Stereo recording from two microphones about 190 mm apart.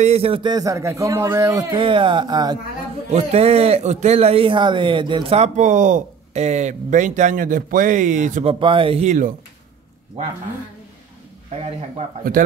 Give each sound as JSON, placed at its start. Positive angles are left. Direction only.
{"t": 0.0, "sound": "a man's voice", "side_deg": -35}
{"t": 3.1, "sound": "a man's voice", "side_deg": -35}
{"t": 8.5, "sound": "a man's voice", "side_deg": -25}